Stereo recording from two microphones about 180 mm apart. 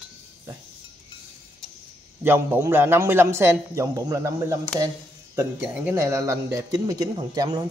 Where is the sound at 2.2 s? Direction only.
10° right (ahead or behind).